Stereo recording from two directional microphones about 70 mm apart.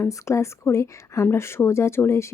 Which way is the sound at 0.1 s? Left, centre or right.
Left.